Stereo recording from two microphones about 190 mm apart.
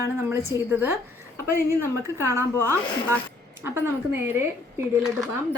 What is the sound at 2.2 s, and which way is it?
Speech, 15° right (ahead or behind).